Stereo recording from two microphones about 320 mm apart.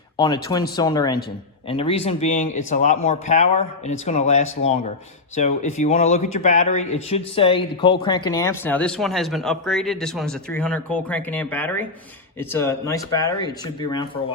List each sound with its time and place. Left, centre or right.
0.8 s speech: centre